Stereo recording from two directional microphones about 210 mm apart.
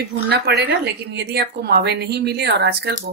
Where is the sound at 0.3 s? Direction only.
50° right (ahead or behind).